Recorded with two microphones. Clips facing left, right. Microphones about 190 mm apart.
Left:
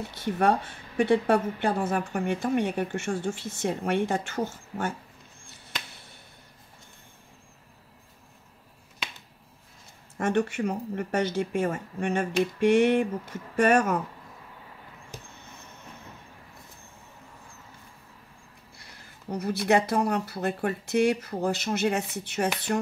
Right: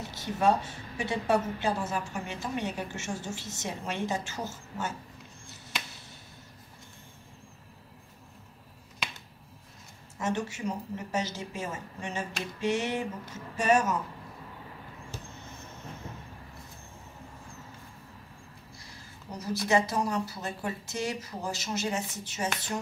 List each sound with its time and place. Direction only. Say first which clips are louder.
0.1 s a woman's voice: left 2 dB; 55° left (ahead or behind)
10.1 s a woman's voice: left 6 dB; 60° left (ahead or behind)
19.3 s a woman's voice: left 3 dB; 60° left (ahead or behind)